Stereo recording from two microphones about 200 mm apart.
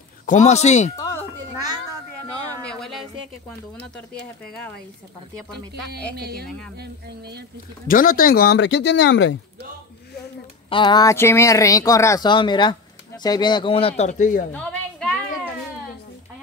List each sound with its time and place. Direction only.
0.3 s speech: 35° left (ahead or behind)
0.9 s a sound: 15° left (ahead or behind)
1.5 s a sound: 15° right (ahead or behind)
2.6 s music: 5° left (ahead or behind)
3.8 s speech: 5° left (ahead or behind)
6.1 s speech: 50° right (ahead or behind)
7.9 s speech: 45° left (ahead or behind); by 9.3 s 65° left (ahead or behind)
10.7 s speech: 25° left (ahead or behind); by 14.4 s 40° left (ahead or behind)
14.5 s a sound: 5° left (ahead or behind)